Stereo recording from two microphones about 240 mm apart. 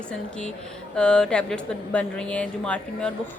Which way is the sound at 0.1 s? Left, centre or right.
Centre.